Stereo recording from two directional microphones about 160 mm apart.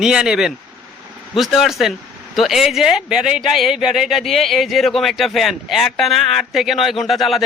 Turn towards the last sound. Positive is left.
turn(degrees=0)  # may be behind; listen again after turning